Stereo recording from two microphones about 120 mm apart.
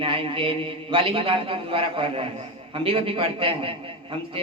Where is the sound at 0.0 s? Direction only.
50° right (ahead or behind).